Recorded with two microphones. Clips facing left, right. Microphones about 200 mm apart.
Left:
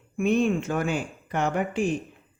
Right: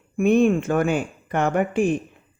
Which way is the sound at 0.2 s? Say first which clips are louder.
Right 5 dB; 50° right (ahead or behind).